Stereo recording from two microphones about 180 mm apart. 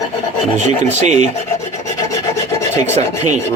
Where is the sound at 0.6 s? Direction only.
40° right (ahead or behind).